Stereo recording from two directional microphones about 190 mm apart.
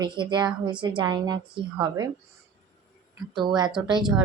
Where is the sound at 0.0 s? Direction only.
25° right (ahead or behind).